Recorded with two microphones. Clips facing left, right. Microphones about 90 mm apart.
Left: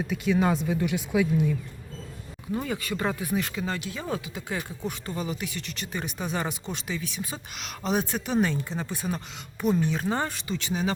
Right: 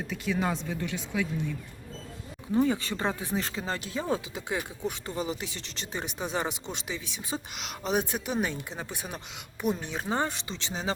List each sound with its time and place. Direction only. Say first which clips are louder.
0.1 s speech: left 5 dB; centre (ahead or behind)
2.6 s speech: right 4 dB; 25° right (ahead or behind)
4.1 s speech: right 1 dB; 20° right (ahead or behind)